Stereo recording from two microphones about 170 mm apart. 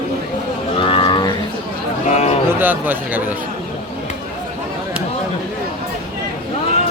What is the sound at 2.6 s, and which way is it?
Speech, 10° right (ahead or behind).